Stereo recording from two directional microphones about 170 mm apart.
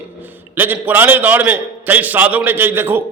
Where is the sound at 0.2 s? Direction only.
10° right (ahead or behind).